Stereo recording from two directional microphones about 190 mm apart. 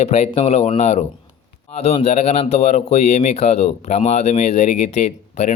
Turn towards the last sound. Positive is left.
turn(degrees=35)  # may be behind; listen again after turning